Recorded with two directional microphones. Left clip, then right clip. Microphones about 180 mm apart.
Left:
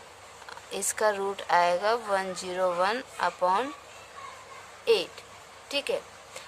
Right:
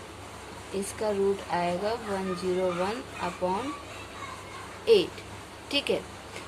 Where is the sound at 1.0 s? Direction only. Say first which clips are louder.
Even; 50° left (ahead or behind).